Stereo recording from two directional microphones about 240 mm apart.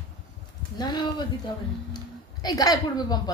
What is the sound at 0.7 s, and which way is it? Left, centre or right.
Speech, centre.